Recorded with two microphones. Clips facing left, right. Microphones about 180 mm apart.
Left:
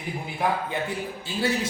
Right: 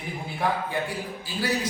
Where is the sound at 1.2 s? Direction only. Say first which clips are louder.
Left 2 dB; 25° left (ahead or behind).